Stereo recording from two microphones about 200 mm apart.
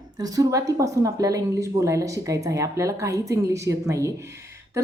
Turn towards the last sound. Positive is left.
turn(degrees=-15)  # may be behind; listen again after turning